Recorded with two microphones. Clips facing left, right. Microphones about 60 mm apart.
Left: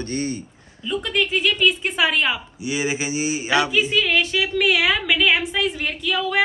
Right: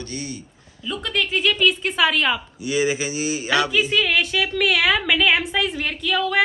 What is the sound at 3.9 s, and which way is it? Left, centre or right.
A woman's voice, centre.